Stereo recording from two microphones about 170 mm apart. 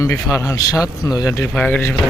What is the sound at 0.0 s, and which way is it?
A man's voice, 15° left (ahead or behind).